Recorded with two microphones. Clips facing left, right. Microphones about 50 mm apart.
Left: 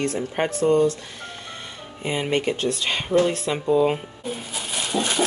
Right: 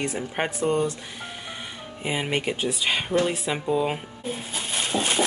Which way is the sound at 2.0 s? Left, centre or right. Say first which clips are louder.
Left 3 dB; centre.